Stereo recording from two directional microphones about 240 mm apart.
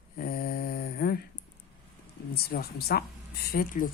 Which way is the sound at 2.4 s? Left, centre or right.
Left.